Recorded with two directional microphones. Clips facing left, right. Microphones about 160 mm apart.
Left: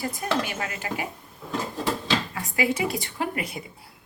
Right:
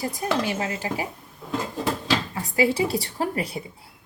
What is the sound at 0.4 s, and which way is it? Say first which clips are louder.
Speech: right 5 dB; 30° right (ahead or behind).